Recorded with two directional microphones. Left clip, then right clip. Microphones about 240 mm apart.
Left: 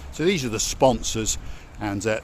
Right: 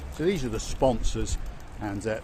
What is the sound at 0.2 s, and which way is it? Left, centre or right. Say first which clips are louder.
Speech: left 5 dB; left.